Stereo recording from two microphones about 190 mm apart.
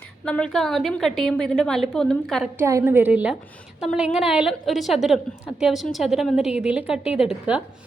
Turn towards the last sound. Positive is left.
turn(degrees=-5)  # may be behind; listen again after turning